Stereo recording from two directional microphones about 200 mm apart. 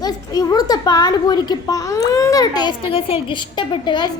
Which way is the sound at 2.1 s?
15° left (ahead or behind).